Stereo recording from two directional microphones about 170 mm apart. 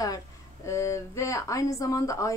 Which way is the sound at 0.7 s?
15° left (ahead or behind).